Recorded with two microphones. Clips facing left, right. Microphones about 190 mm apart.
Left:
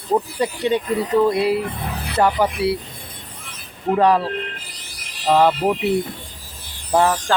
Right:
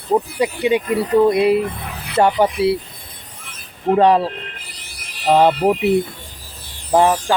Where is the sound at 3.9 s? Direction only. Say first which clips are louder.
Right 3 dB; 25° right (ahead or behind).